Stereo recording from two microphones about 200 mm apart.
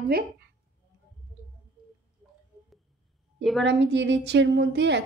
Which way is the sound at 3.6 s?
60° right (ahead or behind).